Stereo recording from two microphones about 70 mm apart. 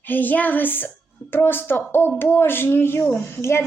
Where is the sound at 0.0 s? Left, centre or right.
Left.